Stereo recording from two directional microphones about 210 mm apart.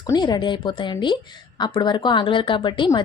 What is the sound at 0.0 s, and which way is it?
A woman's voice, 20° left (ahead or behind).